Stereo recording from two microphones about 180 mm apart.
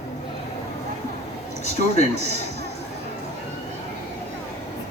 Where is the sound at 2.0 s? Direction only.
35° right (ahead or behind).